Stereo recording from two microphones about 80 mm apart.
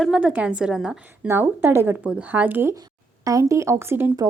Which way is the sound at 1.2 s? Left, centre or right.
Right.